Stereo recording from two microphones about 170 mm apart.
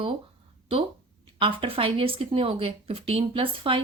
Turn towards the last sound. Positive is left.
turn(degrees=-30)  # may be behind; listen again after turning